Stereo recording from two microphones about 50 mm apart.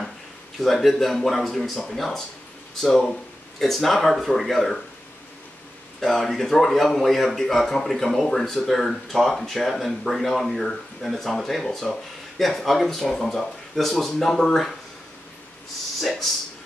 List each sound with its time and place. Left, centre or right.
0.6 s speech: centre
5.9 s speech: centre
16.0 s a sound: centre